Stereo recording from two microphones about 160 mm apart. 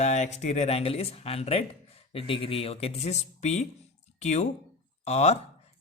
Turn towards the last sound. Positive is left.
turn(degrees=45)  # may be behind; listen again after turning